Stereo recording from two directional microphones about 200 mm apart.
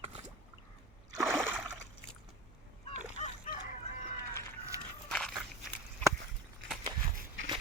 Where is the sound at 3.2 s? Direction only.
35° left (ahead or behind).